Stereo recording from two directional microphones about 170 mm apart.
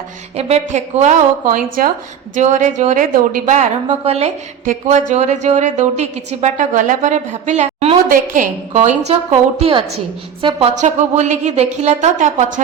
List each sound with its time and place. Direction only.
0.3 s a woman's voice: 40° right (ahead or behind)
4.6 s a woman's voice: 50° right (ahead or behind)
8.1 s a woman's voice: 50° right (ahead or behind); by 10.6 s 30° right (ahead or behind)
10.8 s a woman's voice: 45° right (ahead or behind)